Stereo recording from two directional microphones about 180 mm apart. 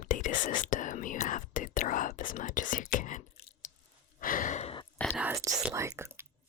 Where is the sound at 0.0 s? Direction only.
45° left (ahead or behind).